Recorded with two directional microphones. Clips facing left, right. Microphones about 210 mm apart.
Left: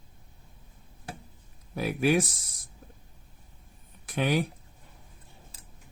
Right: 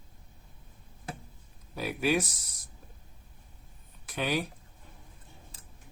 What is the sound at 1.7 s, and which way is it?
Speech, 55° left (ahead or behind).